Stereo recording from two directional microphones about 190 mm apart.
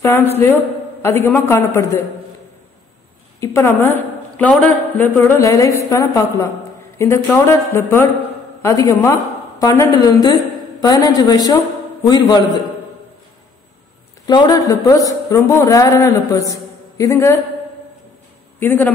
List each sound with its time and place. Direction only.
0.0 s a man's voice: 10° left (ahead or behind)
3.3 s a man's voice: 15° left (ahead or behind)
14.2 s a man's voice: 20° left (ahead or behind)
18.6 s a man's voice: 10° left (ahead or behind)